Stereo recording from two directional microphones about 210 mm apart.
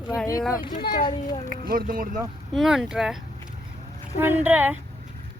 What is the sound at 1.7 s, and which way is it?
Speech, 40° right (ahead or behind).